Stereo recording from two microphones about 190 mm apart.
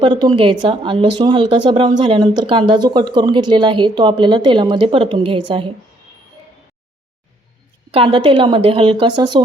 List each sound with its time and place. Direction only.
0.0 s a woman's voice: 25° right (ahead or behind)
7.9 s a woman's voice: 30° right (ahead or behind)